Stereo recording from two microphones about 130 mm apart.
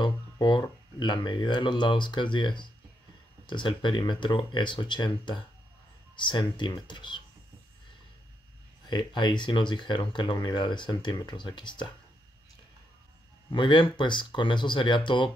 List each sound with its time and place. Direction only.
0.0 s speech: 35° left (ahead or behind)
8.8 s speech: 35° left (ahead or behind)
13.5 s speech: 40° left (ahead or behind)